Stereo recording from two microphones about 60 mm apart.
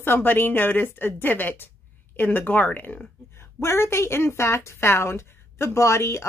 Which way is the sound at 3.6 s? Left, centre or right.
Left.